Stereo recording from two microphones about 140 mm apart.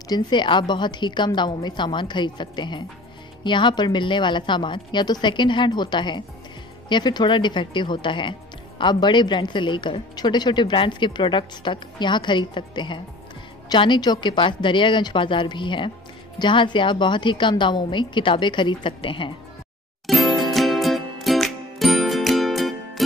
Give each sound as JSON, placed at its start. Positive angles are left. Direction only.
{"t": 0.1, "sound": "speech", "side_deg": 35}
{"t": 20.1, "sound": "music", "side_deg": 0}